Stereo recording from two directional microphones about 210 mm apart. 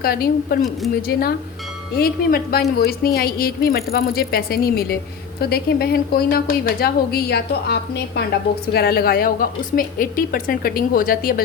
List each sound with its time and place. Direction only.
0.0 s a woman's voice: 45° left (ahead or behind)